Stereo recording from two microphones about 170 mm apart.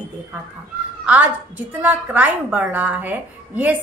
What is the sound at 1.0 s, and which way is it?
A woman's voice, 10° right (ahead or behind).